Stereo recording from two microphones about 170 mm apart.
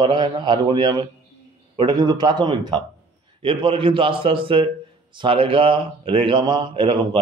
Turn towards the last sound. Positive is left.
turn(degrees=-30)  # may be behind; listen again after turning